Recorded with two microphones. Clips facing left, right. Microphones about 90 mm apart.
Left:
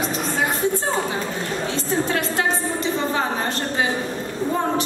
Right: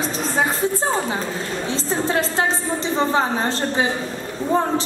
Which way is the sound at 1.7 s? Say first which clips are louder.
Right 2 dB; 25° right (ahead or behind).